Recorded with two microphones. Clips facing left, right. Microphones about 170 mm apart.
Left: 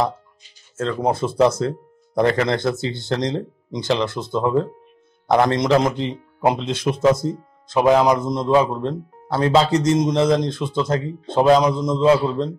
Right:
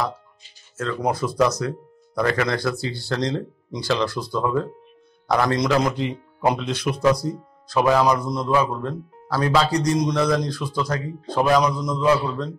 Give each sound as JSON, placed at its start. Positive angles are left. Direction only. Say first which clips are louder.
{"t": 0.7, "sound": "speech", "louder": "left 3 dB", "side_deg": 25}